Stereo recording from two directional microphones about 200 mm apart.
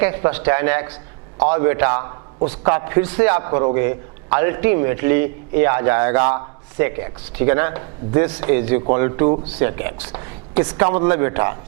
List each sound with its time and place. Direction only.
0.0 s a man's voice: 15° right (ahead or behind)